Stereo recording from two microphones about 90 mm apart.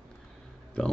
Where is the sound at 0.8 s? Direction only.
10° left (ahead or behind).